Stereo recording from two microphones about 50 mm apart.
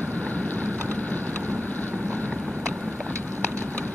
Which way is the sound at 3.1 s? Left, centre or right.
Right.